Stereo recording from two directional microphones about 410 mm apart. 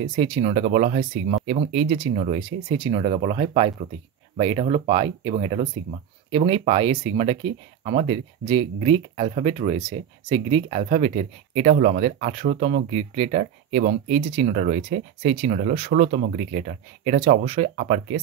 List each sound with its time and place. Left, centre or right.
0.1 s speech: centre